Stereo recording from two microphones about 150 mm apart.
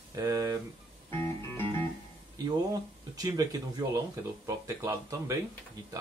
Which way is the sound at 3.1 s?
25° right (ahead or behind).